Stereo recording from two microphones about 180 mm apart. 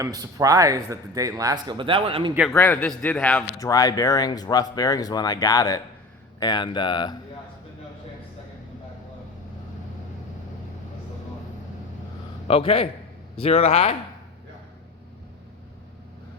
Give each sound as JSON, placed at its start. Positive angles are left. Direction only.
{"t": 0.0, "sound": "a man's voice", "side_deg": -20}
{"t": 2.5, "sound": "a man's voice", "side_deg": 10}
{"t": 3.6, "sound": "speech", "side_deg": 20}
{"t": 12.5, "sound": "a man's voice", "side_deg": 30}